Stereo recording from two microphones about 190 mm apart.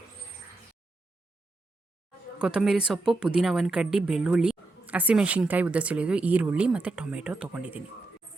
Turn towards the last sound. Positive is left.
turn(degrees=-5)  # may be behind; listen again after turning